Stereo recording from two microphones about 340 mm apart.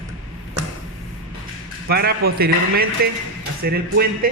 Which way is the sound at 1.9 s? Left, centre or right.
Right.